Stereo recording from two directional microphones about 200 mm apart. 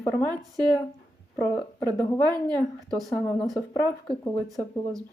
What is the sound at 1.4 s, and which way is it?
Speech, 10° left (ahead or behind).